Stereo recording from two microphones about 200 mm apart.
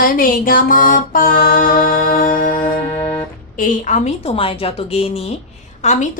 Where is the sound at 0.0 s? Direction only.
45° left (ahead or behind).